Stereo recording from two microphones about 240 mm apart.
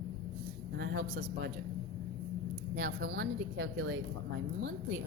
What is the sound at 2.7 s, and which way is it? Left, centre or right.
Speech, right.